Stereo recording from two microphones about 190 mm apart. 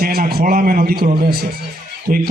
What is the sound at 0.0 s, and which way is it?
A man's voice, 50° right (ahead or behind).